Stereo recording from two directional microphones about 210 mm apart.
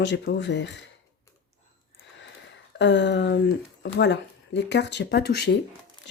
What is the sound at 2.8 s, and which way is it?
Speech, 55° left (ahead or behind).